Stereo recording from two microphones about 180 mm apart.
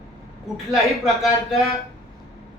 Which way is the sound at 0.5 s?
Centre (ahead or behind).